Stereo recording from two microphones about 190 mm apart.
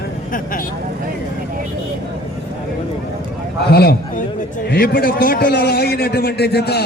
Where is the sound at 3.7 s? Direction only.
55° left (ahead or behind).